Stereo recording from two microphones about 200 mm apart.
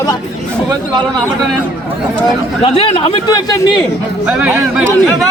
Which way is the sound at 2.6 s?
30° left (ahead or behind).